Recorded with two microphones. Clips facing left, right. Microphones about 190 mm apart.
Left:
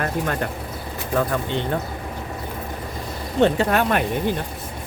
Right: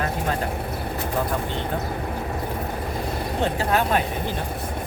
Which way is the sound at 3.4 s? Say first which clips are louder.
Left 6 dB; 65° left (ahead or behind).